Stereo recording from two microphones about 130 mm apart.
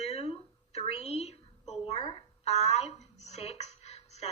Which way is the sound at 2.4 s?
55° left (ahead or behind).